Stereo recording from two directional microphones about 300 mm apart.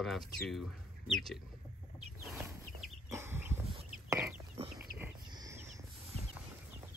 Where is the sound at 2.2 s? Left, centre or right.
Centre.